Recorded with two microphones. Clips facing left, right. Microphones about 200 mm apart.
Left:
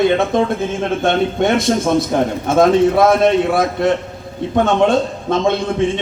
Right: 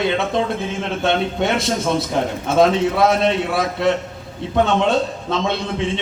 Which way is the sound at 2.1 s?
50° left (ahead or behind).